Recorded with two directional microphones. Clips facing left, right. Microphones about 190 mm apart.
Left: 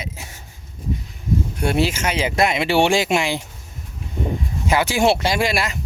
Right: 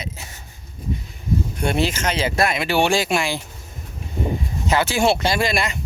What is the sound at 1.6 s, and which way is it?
Speech, 5° left (ahead or behind).